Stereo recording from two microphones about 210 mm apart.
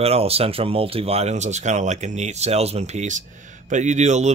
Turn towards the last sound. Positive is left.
turn(degrees=-35)  # may be behind; listen again after turning